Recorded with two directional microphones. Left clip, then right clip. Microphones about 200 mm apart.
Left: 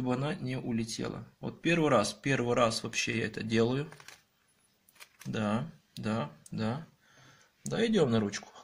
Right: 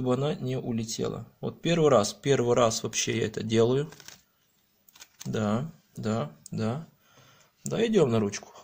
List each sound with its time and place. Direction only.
0.0 s speech: 50° right (ahead or behind)
5.3 s speech: 45° right (ahead or behind)